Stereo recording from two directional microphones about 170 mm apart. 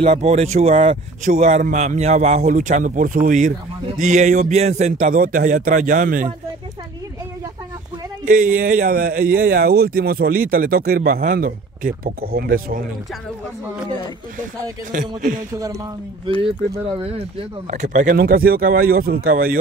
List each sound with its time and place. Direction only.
0.0 s speech: 40° right (ahead or behind)
1.2 s a man's voice: 45° right (ahead or behind)
8.3 s speech: 55° right (ahead or behind)
14.9 s a man's voice: 50° right (ahead or behind)
17.6 s speech: 45° right (ahead or behind)